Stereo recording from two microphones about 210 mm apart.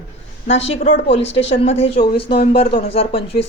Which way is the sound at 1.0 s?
25° left (ahead or behind).